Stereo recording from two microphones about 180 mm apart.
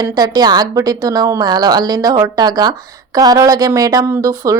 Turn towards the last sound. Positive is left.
turn(degrees=-15)  # may be behind; listen again after turning